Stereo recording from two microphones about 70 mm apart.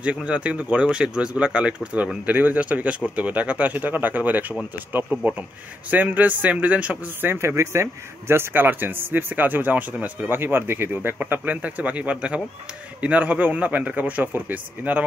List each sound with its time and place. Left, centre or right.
0.0 s speech: centre
7.2 s speech: right